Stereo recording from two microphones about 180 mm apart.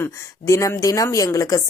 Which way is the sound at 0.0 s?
15° left (ahead or behind).